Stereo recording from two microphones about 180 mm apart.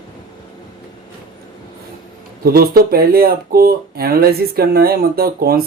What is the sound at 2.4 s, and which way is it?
Speech, 55° right (ahead or behind).